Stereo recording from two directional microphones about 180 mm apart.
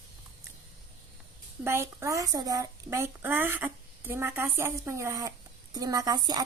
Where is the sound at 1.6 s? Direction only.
15° right (ahead or behind).